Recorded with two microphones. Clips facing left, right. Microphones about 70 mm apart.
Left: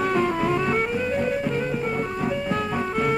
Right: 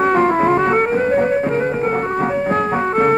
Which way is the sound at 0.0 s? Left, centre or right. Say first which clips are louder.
Right 8 dB; right.